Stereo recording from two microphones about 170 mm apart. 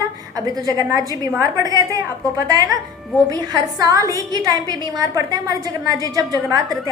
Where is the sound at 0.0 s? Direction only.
20° right (ahead or behind).